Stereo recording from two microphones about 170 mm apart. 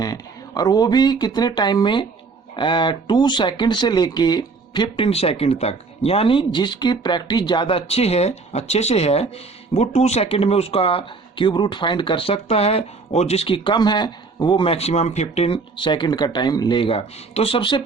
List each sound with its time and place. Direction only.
0.0 s speech: 20° left (ahead or behind)